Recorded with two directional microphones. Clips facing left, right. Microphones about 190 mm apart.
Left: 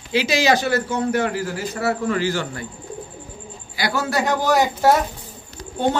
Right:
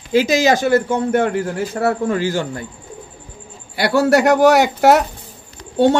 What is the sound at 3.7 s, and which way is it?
A man's voice, 65° right (ahead or behind).